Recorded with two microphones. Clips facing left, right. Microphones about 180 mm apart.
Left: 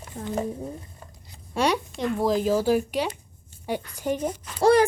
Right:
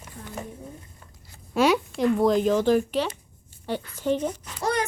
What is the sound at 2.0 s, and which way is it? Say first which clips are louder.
A woman's voice: right 3 dB; centre (ahead or behind).